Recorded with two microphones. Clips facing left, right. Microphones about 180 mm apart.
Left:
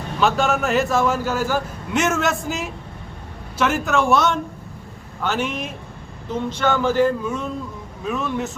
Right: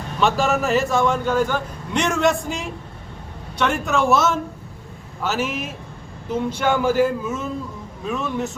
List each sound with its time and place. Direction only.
0.2 s a man's voice: centre (ahead or behind)